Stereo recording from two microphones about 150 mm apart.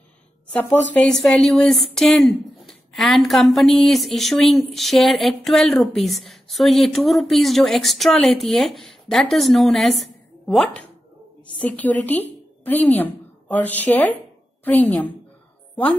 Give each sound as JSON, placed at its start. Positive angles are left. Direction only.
{"t": 0.5, "sound": "a woman's voice", "side_deg": 10}